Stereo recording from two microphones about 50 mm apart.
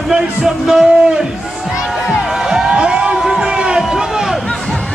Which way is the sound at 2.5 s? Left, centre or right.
Centre.